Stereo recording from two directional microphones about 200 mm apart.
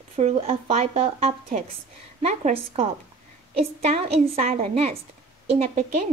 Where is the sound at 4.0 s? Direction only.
30° right (ahead or behind).